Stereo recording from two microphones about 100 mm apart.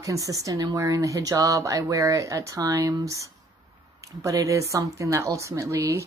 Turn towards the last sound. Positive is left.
turn(degrees=-30)  # may be behind; listen again after turning